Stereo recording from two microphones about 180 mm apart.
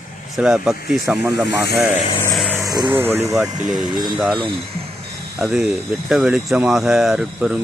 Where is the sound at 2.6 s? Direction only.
20° right (ahead or behind).